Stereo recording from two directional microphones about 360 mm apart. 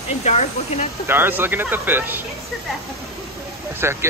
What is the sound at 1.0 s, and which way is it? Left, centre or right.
Speech, centre.